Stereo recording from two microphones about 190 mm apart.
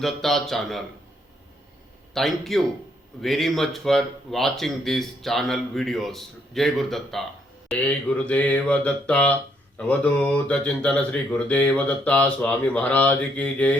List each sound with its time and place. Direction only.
0.0 s speech: centre (ahead or behind)
2.1 s speech: centre (ahead or behind)